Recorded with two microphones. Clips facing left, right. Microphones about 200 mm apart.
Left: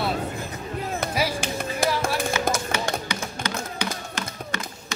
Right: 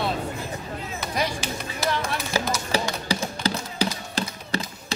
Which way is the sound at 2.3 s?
35° right (ahead or behind).